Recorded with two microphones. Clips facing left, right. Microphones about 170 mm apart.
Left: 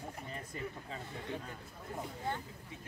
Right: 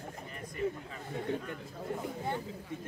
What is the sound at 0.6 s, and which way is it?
Speech, 25° right (ahead or behind).